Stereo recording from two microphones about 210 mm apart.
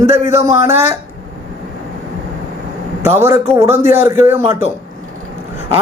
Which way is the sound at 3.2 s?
10° right (ahead or behind).